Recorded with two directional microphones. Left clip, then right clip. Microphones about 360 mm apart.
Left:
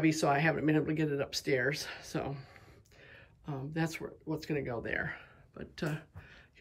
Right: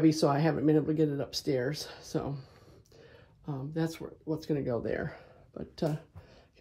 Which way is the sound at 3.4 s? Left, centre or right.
Centre.